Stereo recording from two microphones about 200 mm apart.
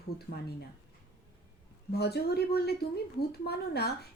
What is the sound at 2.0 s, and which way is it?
Speech, 55° left (ahead or behind).